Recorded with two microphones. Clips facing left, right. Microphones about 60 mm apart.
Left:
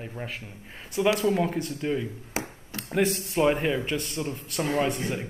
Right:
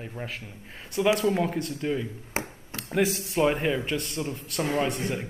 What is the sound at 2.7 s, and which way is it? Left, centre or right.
Speech, centre.